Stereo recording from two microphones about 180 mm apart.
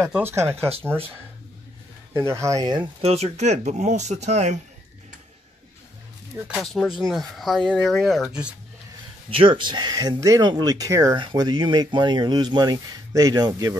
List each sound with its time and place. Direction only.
0.1 s speech: 15° right (ahead or behind)
2.1 s speech: 15° right (ahead or behind)
3.0 s speech: 35° right (ahead or behind)
6.3 s speech: 5° right (ahead or behind)
9.3 s speech: 30° right (ahead or behind)